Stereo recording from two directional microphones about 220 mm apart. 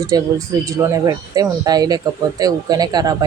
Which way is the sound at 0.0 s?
15° right (ahead or behind).